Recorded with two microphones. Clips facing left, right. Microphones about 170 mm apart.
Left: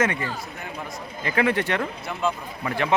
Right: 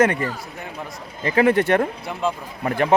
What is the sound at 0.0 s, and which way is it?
A man's voice, 40° right (ahead or behind).